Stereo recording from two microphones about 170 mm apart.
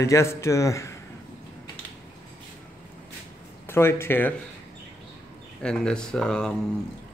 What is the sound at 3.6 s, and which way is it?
Speech, 15° left (ahead or behind).